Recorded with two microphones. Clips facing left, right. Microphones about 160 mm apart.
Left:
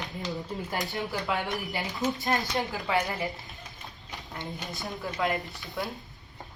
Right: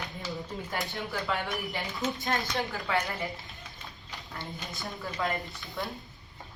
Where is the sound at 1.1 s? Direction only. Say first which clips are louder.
Even; 15° left (ahead or behind).